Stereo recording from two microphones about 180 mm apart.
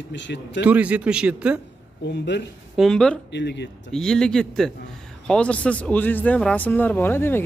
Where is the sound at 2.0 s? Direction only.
75° left (ahead or behind).